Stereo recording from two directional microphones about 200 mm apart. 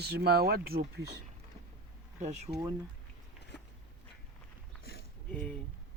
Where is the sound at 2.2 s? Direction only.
35° right (ahead or behind).